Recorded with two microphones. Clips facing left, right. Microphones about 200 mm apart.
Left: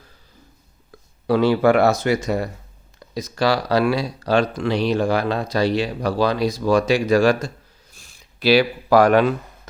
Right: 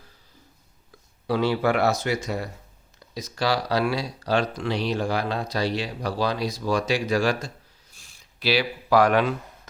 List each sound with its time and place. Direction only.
1.3 s speech: 55° left (ahead or behind)